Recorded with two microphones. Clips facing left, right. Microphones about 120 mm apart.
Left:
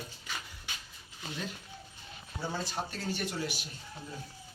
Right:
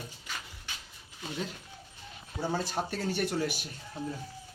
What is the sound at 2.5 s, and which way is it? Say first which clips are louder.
Speech: right 5 dB; 50° right (ahead or behind).